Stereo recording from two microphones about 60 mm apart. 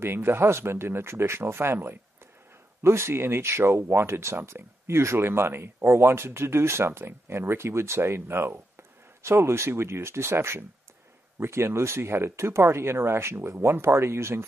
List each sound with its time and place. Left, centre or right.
0.0 s speech: right